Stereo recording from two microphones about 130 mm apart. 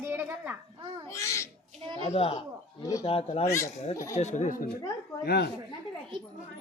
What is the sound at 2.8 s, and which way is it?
Speech, 25° left (ahead or behind).